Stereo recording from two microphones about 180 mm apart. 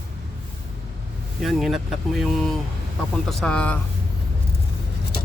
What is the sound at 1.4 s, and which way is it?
Speech, centre (ahead or behind).